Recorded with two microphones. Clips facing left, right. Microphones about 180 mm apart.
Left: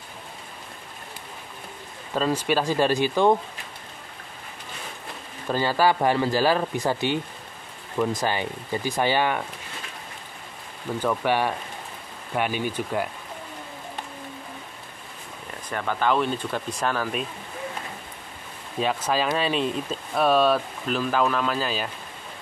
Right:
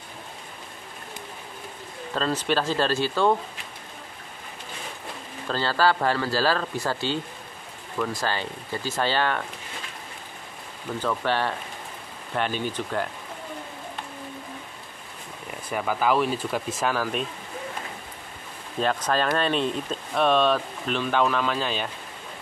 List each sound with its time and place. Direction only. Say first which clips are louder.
2.1 s speech: left 2 dB; 10° left (ahead or behind)
5.5 s speech: left 2 dB; 15° left (ahead or behind)
11.0 s speech: left 2 dB; 15° left (ahead or behind)
15.7 s speech: right 1 dB; 5° right (ahead or behind)
18.8 s speech: even; 5° left (ahead or behind)